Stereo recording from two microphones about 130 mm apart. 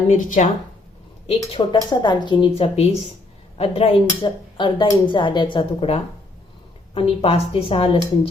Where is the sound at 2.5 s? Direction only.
50° left (ahead or behind).